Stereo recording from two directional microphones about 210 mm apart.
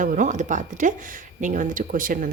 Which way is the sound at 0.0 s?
35° right (ahead or behind).